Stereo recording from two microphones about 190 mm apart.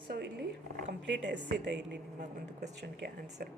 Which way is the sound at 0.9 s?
70° right (ahead or behind).